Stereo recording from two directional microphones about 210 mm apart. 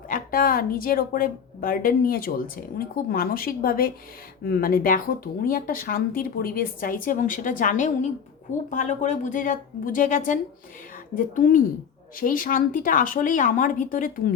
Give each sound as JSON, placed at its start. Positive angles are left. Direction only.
{"t": 0.1, "sound": "a woman's voice", "side_deg": 45}